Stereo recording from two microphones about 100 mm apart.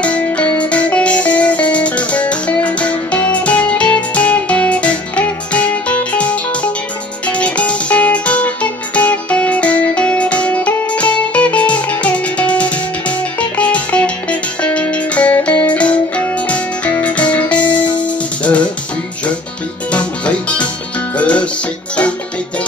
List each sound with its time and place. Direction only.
0.0 s music: 15° left (ahead or behind)
19.9 s music: 10° left (ahead or behind)